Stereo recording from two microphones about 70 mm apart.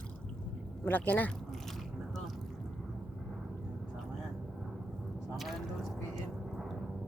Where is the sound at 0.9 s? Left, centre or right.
Left.